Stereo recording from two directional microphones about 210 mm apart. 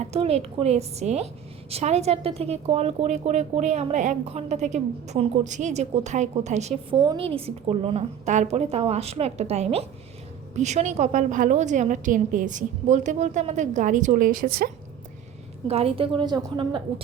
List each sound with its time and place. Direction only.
0.0 s a woman's voice: 30° right (ahead or behind)
6.9 s a woman's voice: 20° right (ahead or behind); by 14.7 s 45° right (ahead or behind)
15.6 s a woman's voice: 30° right (ahead or behind)